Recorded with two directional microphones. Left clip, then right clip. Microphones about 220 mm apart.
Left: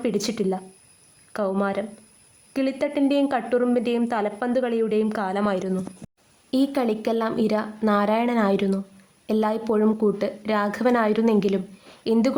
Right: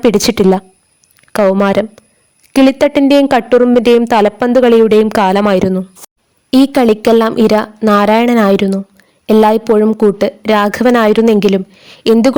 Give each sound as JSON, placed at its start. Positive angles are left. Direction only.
{"t": 0.0, "sound": "a woman's voice", "side_deg": -45}